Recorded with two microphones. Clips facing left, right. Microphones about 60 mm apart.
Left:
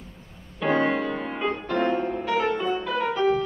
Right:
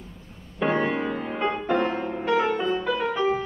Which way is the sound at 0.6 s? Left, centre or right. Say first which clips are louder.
Left 1 dB; centre.